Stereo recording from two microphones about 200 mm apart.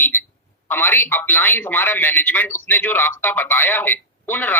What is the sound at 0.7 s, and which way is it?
Speech, 10° left (ahead or behind).